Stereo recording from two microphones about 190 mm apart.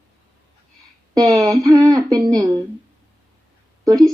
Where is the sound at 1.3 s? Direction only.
20° right (ahead or behind).